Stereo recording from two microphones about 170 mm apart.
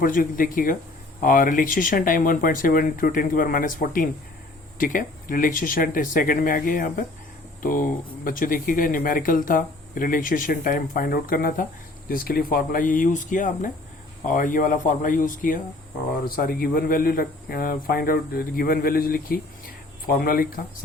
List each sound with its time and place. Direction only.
0.0 s a man's voice: 55° left (ahead or behind)